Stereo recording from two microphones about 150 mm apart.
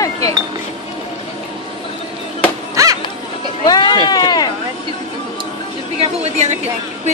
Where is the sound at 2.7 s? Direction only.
20° right (ahead or behind).